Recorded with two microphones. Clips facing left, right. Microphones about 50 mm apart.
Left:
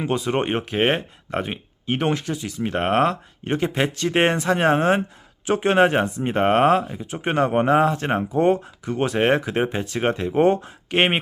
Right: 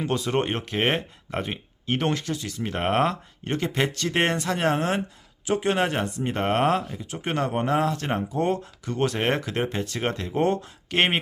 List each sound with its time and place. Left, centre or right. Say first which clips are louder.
0.0 s speech: left 2 dB; centre
5.5 s speech: left 6 dB; left; by 11.2 s centre